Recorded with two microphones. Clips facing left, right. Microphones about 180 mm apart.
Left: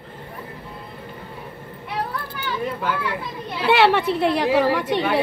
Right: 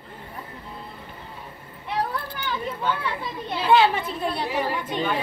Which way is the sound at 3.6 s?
75° left (ahead or behind).